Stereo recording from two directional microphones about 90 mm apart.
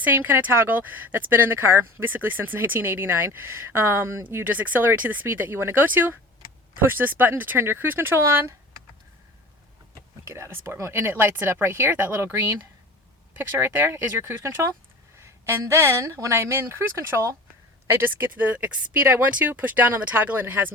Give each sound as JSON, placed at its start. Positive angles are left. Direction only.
{"t": 0.0, "sound": "speech", "side_deg": -20}
{"t": 10.2, "sound": "speech", "side_deg": -30}
{"t": 13.6, "sound": "speech", "side_deg": -25}